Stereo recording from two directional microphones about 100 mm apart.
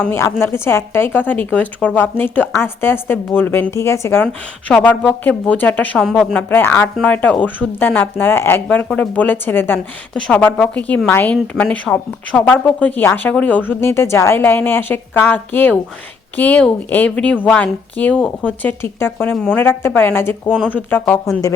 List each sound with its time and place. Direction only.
0.1 s a woman's voice: 25° left (ahead or behind)
3.7 s a woman's voice: 30° left (ahead or behind)
4.2 s speech: 10° left (ahead or behind)
6.5 s a woman's voice: 20° left (ahead or behind)
18.8 s a woman's voice: 25° left (ahead or behind)
19.3 s a woman's voice: 10° left (ahead or behind)